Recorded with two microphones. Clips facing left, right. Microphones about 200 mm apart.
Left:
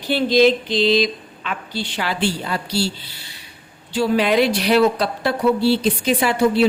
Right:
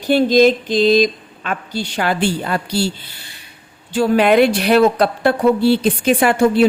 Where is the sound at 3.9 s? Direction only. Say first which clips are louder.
Right 4 dB; 50° right (ahead or behind).